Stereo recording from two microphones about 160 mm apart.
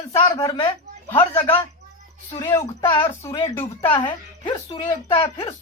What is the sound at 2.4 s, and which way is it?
A woman's voice, 20° left (ahead or behind).